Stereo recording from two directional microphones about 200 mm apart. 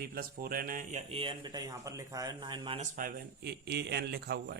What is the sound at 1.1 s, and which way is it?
Speech, 25° right (ahead or behind).